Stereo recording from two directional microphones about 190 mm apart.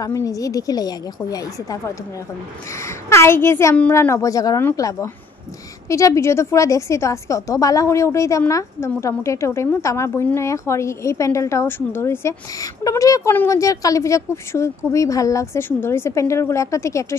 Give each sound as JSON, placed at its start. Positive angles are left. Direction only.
{"t": 0.0, "sound": "a woman's voice", "side_deg": 20}
{"t": 2.8, "sound": "a woman's voice", "side_deg": 15}